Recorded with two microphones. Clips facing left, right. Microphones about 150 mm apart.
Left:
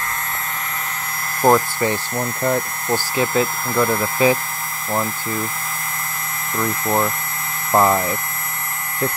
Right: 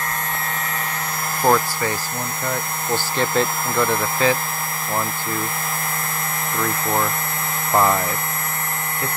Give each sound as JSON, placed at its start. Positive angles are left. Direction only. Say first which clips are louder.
{"t": 1.4, "sound": "speech", "louder": "left 3 dB", "side_deg": 20}
{"t": 2.9, "sound": "speech", "louder": "left 2 dB", "side_deg": 5}
{"t": 7.7, "sound": "speech", "louder": "left 2 dB", "side_deg": 15}